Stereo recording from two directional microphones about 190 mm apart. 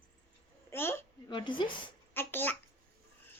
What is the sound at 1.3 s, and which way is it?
Speech, 25° left (ahead or behind).